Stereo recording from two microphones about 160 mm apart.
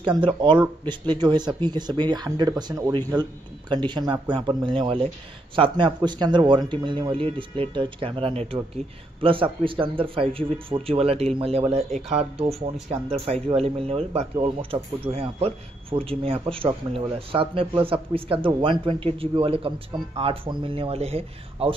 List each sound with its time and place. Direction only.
0.0 s speech: 30° right (ahead or behind)